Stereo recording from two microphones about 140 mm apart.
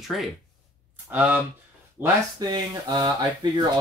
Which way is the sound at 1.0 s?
10° right (ahead or behind).